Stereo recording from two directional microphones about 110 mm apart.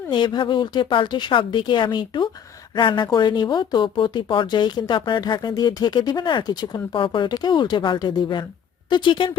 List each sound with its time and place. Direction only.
0.1 s speech: 45° left (ahead or behind)